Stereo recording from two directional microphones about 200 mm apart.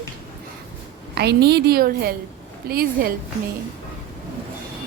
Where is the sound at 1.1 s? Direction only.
55° right (ahead or behind).